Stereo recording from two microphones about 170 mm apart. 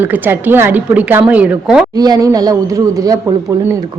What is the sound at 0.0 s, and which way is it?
A woman's voice, 10° right (ahead or behind).